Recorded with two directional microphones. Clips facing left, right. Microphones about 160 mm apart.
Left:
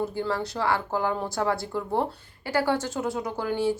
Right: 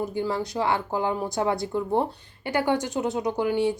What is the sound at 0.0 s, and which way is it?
A woman's voice, 20° right (ahead or behind).